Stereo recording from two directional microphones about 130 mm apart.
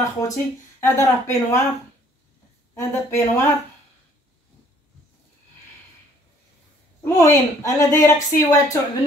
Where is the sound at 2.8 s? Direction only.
20° left (ahead or behind).